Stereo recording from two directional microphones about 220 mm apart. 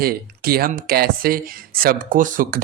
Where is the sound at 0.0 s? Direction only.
45° right (ahead or behind).